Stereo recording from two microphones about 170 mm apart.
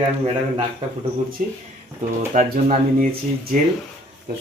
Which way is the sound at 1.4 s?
50° right (ahead or behind).